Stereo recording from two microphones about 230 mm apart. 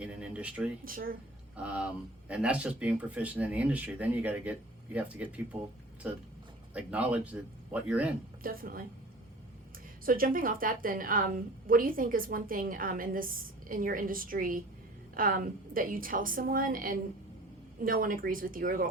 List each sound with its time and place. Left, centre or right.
0.0 s speech: centre
0.9 s a woman's voice: right
1.5 s speech: centre
6.7 s speech: centre
8.4 s a woman's voice: right
10.1 s a woman's voice: right